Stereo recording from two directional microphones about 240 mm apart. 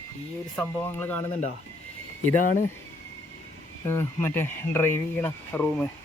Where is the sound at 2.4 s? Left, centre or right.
Left.